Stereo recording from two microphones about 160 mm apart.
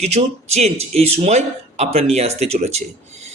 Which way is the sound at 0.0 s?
40° right (ahead or behind).